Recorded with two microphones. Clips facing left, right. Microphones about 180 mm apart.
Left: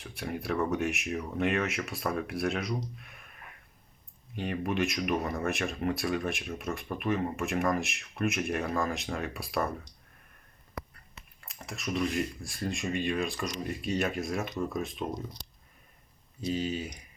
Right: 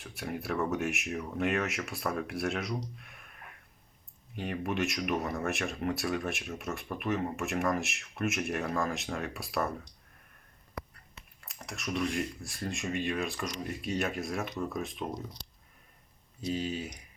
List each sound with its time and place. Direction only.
0.0 s speech: centre (ahead or behind)
4.4 s speech: centre (ahead or behind)
11.4 s speech: centre (ahead or behind)
16.5 s speech: centre (ahead or behind)